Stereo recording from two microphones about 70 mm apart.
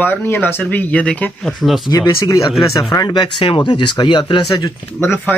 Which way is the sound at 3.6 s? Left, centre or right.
Left.